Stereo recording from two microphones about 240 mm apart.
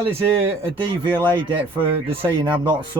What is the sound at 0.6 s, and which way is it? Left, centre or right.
Speech, centre.